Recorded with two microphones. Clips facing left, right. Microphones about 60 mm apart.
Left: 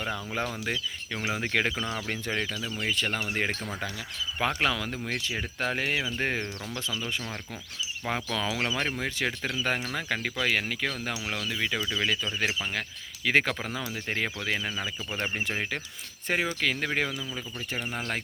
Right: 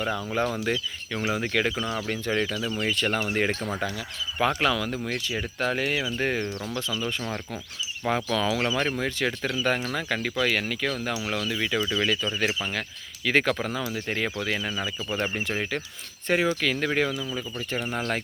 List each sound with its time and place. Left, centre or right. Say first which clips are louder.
0.0 s speech: right 5 dB; centre
2.4 s speech: right 5 dB; centre
4.4 s speech: right 4 dB; centre
6.9 s speech: right 3 dB; centre